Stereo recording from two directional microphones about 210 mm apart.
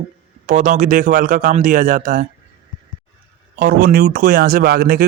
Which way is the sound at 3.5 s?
45° right (ahead or behind).